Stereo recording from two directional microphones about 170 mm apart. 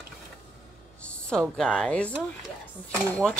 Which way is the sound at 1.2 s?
5° left (ahead or behind).